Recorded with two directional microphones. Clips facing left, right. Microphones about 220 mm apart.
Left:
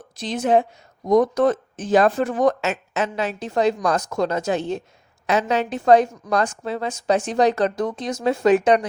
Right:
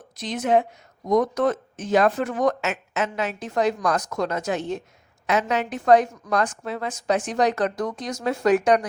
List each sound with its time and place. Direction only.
0.2 s a woman's voice: 30° left (ahead or behind)